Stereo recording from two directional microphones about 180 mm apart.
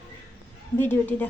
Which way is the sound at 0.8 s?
10° left (ahead or behind).